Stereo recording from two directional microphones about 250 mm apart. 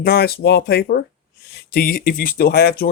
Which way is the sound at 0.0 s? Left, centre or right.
Left.